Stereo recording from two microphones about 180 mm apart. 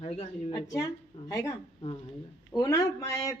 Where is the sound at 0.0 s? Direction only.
35° left (ahead or behind).